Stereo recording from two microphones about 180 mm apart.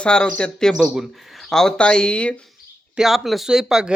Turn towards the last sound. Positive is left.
turn(degrees=-5)  # may be behind; listen again after turning